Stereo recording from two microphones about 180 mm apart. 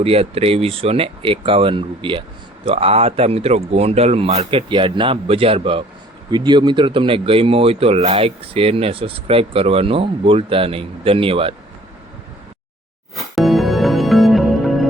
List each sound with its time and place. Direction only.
0.0 s speech: 35° right (ahead or behind)
13.1 s music: centre (ahead or behind)